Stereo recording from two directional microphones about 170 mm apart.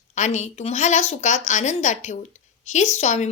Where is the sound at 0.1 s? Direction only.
45° left (ahead or behind).